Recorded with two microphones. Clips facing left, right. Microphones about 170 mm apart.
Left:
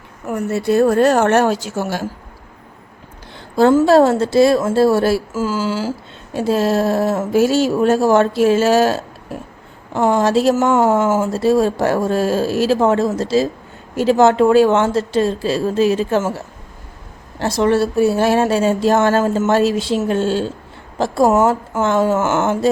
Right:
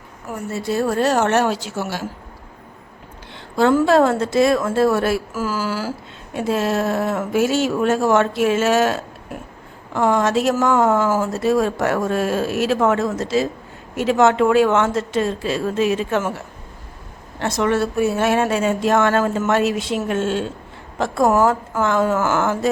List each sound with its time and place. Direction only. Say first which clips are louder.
0.3 s a woman's voice: left 7 dB; 65° left (ahead or behind); by 2.0 s 45° left (ahead or behind)
3.6 s speech: left 4 dB; 30° left (ahead or behind)
17.4 s a woman's voice: left 4 dB; 35° left (ahead or behind)